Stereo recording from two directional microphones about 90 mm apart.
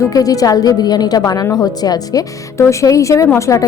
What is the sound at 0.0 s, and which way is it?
A woman's voice, 40° left (ahead or behind).